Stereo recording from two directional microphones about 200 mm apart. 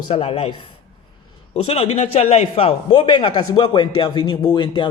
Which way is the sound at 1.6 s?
30° left (ahead or behind).